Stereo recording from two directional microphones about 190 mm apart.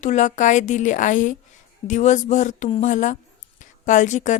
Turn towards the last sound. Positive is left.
turn(degrees=40)  # may be behind; listen again after turning